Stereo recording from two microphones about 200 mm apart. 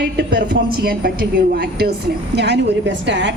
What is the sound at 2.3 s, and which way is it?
A woman's voice, 60° right (ahead or behind).